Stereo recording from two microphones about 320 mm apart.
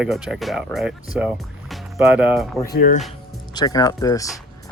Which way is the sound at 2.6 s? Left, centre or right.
Left.